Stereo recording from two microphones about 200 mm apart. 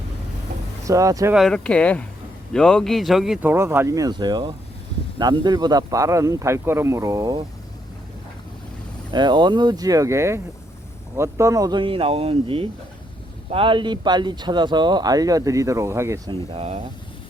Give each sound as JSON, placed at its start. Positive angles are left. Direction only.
{"t": 0.9, "sound": "speech", "side_deg": -15}
{"t": 1.3, "sound": "speech", "side_deg": 0}
{"t": 9.1, "sound": "speech", "side_deg": -20}
{"t": 16.6, "sound": "speech", "side_deg": -30}